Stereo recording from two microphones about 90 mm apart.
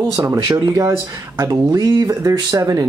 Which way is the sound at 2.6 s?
40° right (ahead or behind).